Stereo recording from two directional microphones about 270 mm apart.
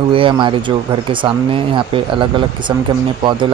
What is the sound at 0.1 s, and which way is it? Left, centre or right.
Speech, centre.